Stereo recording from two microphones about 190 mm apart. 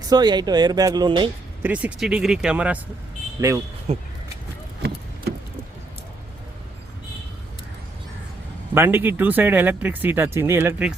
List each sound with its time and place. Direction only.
0.1 s speech: 20° right (ahead or behind)
1.6 s speech: 5° right (ahead or behind)
3.4 s speech: 15° right (ahead or behind)
3.9 s speech: 35° right (ahead or behind)
8.7 s speech: 10° right (ahead or behind)